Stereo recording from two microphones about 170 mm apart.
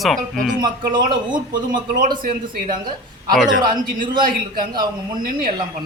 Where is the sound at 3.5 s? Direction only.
50° right (ahead or behind).